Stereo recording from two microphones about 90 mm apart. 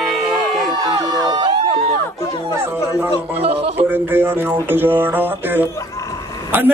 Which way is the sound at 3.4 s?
90° right.